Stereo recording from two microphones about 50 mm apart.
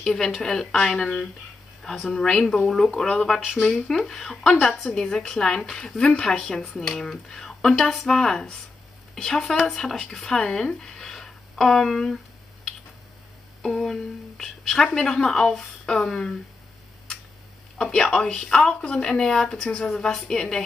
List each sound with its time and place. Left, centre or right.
0.0 s a woman's voice: centre
3.3 s speech: centre
3.8 s a woman's voice: centre
11.9 s speech: centre
13.6 s a woman's voice: centre
17.7 s a woman's voice: centre